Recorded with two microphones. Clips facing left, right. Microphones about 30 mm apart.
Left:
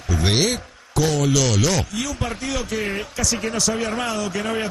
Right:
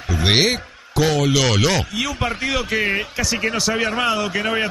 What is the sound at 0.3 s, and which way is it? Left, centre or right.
A man's voice, right.